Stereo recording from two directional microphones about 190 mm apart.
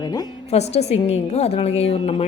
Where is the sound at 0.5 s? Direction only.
35° left (ahead or behind).